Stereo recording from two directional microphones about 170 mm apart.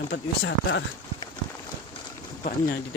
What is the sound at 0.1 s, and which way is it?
Speech, 90° left.